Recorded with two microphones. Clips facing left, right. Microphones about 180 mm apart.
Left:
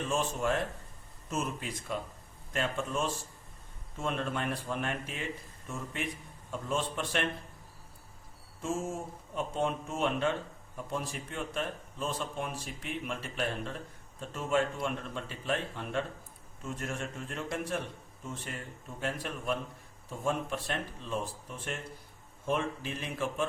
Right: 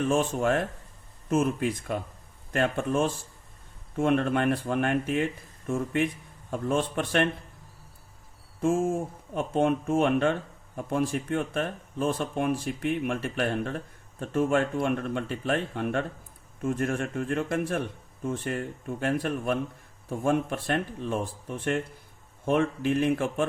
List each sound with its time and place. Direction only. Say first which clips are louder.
0.0 s speech: right 7 dB; 60° right (ahead or behind)
8.6 s speech: right 9 dB; 55° right (ahead or behind)